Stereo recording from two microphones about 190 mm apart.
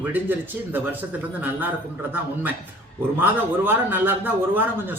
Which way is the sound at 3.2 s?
10° right (ahead or behind).